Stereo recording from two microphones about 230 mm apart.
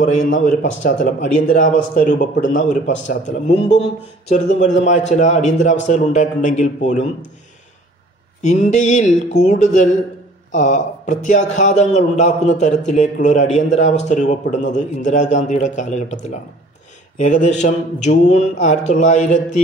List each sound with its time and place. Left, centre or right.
0.1 s a man's voice: left
8.4 s a man's voice: left